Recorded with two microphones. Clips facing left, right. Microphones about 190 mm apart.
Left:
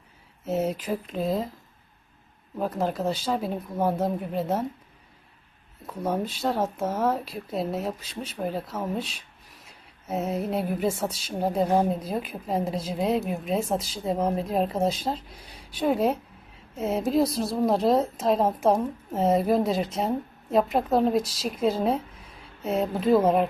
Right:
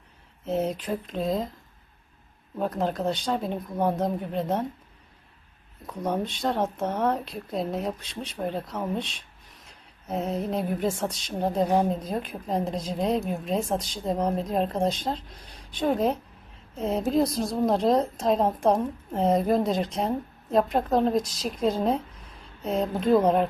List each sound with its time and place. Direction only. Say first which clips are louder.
0.4 s a woman's voice: left 1 dB; 5° left (ahead or behind)
2.6 s a woman's voice: even; 5° left (ahead or behind)
5.8 s a woman's voice: even; 5° left (ahead or behind)